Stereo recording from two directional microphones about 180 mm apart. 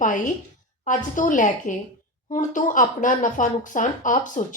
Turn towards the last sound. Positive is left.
turn(degrees=45)  # may be behind; listen again after turning